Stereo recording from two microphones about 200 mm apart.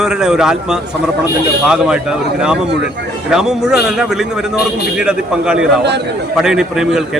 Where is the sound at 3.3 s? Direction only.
5° right (ahead or behind).